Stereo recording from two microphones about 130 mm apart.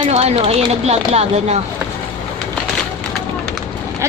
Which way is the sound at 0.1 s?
50° right (ahead or behind).